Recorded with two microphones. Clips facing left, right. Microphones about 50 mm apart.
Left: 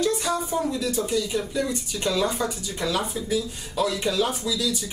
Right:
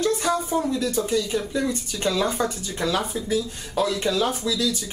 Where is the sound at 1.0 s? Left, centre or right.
Centre.